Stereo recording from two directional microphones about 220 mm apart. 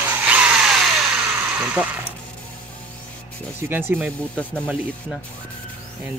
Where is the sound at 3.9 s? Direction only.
5° left (ahead or behind).